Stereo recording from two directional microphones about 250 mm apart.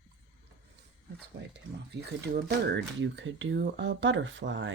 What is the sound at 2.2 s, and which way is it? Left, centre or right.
Speech, right.